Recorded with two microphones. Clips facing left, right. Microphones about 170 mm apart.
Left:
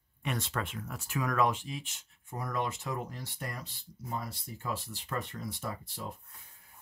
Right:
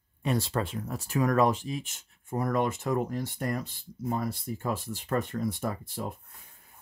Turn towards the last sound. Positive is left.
turn(degrees=-50)  # may be behind; listen again after turning